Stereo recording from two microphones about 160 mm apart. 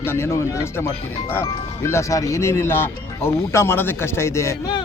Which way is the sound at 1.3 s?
15° left (ahead or behind).